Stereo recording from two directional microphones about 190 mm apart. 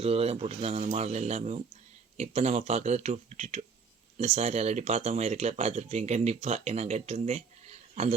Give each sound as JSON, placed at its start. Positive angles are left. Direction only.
{"t": 0.0, "sound": "speech", "side_deg": -30}